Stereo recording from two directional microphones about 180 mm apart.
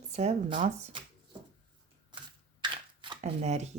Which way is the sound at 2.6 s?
25° right (ahead or behind).